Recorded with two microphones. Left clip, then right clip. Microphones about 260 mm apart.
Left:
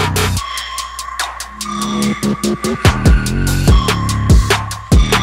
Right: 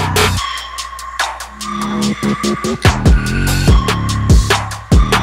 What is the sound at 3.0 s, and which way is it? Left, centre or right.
Music, left.